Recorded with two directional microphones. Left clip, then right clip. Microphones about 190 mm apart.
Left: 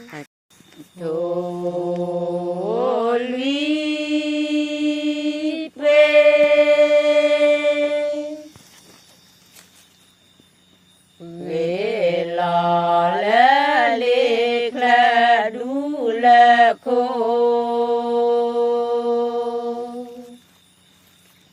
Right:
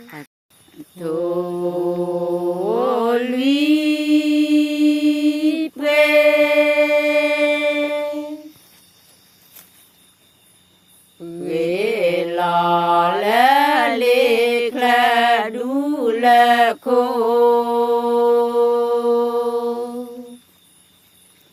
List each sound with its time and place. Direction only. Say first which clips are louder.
0.9 s mantra: right 1 dB; 35° right (ahead or behind); by 8.4 s 10° right (ahead or behind)
11.2 s mantra: right 2 dB; 20° right (ahead or behind)